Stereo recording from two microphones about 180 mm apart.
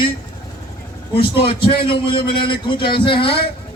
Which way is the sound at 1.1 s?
30° left (ahead or behind).